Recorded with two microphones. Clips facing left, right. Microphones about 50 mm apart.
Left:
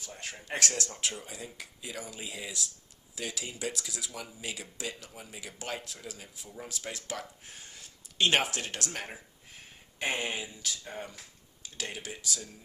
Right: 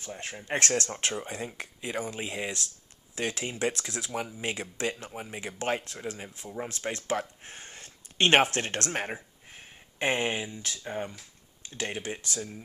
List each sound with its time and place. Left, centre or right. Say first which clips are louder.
0.4 s speech: right 4 dB; right
0.7 s speech: right 6 dB; right
12.0 s speech: right 4 dB; right